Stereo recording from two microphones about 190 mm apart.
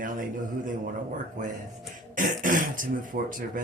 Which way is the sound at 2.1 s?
45° right (ahead or behind).